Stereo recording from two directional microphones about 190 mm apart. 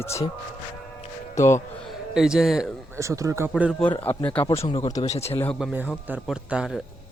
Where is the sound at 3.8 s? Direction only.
10° left (ahead or behind).